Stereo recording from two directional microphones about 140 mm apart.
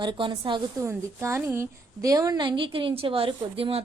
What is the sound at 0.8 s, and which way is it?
A woman's voice, 20° right (ahead or behind).